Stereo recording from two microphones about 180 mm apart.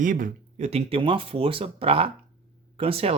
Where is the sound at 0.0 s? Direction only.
50° right (ahead or behind).